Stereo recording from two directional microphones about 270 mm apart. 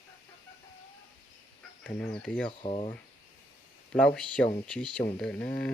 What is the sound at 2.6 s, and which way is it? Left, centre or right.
Speech, left.